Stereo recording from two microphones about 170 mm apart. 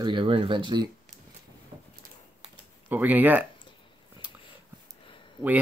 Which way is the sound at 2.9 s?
10° right (ahead or behind).